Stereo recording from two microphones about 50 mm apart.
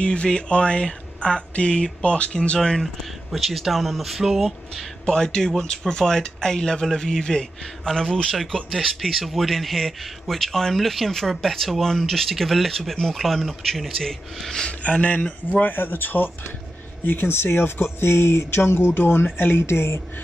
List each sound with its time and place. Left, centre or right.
0.0 s speech: centre
2.8 s speech: centre
5.0 s speech: centre
14.7 s speech: left
15.6 s speech: left